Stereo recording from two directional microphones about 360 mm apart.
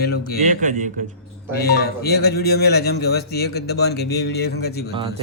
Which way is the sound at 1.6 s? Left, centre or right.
Left.